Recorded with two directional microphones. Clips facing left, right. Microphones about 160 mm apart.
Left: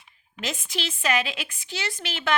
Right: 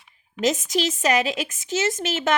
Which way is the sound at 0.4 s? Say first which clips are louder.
Right 10 dB; 40° right (ahead or behind).